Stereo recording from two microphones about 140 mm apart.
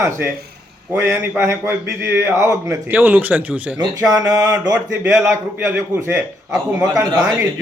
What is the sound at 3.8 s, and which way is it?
A man's voice, 25° right (ahead or behind).